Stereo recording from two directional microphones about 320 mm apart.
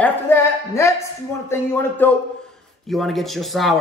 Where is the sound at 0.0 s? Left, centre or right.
Centre.